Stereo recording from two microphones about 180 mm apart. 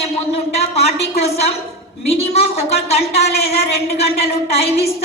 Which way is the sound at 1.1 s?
35° left (ahead or behind).